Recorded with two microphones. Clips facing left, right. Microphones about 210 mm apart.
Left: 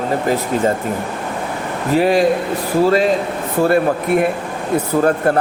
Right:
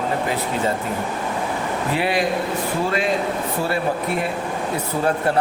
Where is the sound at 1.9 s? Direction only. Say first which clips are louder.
Left 9 dB; 40° left (ahead or behind).